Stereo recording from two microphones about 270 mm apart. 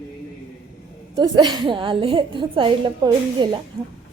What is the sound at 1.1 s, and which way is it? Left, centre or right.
A woman's voice, centre.